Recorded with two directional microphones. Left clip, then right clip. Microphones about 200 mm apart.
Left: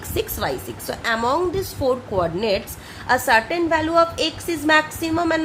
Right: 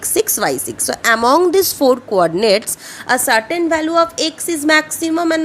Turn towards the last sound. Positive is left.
turn(degrees=-35)  # may be behind; listen again after turning